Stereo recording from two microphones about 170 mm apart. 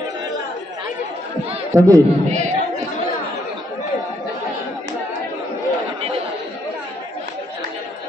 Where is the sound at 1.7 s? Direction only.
20° right (ahead or behind).